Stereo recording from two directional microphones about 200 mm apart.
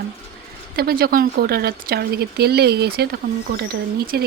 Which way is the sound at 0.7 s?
50° right (ahead or behind).